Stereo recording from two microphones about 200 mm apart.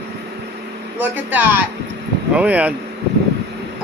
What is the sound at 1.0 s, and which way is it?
A man's voice, 10° right (ahead or behind).